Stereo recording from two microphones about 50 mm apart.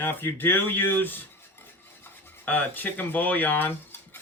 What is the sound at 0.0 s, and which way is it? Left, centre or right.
Speech, left.